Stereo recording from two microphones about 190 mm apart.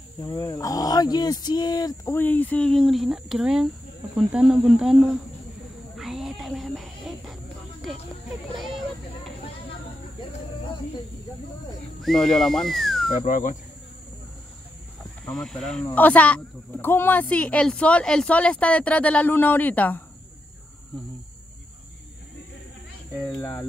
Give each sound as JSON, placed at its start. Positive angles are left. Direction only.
{"t": 0.2, "sound": "speech", "side_deg": 20}
{"t": 5.9, "sound": "cricket", "side_deg": 0}
{"t": 8.5, "sound": "a sound", "side_deg": 0}
{"t": 12.0, "sound": "speech", "side_deg": 0}
{"t": 13.2, "sound": "speech", "side_deg": 40}
{"t": 15.3, "sound": "speech", "side_deg": 0}